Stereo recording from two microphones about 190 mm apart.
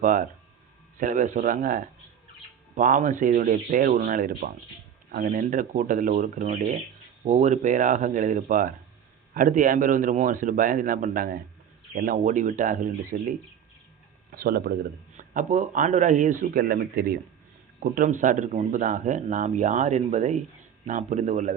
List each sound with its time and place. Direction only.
0.0 s a man's voice: 45° right (ahead or behind)
14.3 s a man's voice: 55° right (ahead or behind)